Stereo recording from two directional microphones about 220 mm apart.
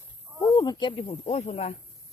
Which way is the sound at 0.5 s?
20° left (ahead or behind).